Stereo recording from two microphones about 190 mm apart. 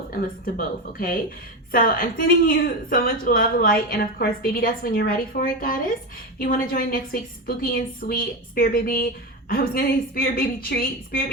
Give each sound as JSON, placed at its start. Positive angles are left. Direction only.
{"t": 0.1, "sound": "a woman's voice", "side_deg": 50}